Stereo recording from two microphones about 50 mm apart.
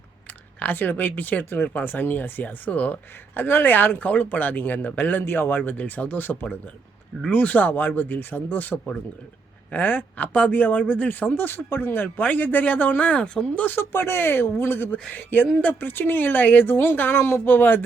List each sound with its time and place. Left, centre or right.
0.6 s speech: left
13.7 s speech: left